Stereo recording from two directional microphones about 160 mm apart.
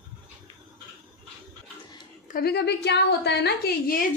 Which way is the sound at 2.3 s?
80° left.